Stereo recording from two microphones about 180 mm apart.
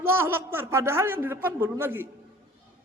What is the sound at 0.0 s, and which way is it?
A man's voice, 15° right (ahead or behind).